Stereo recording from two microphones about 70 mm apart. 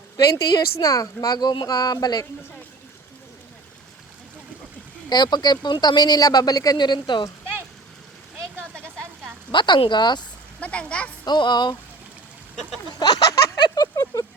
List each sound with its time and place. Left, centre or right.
0.3 s a woman's voice: left
5.0 s speech: left
8.7 s a sound: centre
9.6 s speech: left
10.6 s speech: centre
11.3 s speech: left
13.0 s a sound: left